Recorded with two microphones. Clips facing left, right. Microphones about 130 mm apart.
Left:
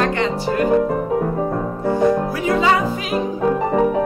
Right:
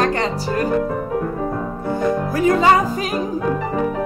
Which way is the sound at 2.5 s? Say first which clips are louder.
Right 2 dB; 45° right (ahead or behind).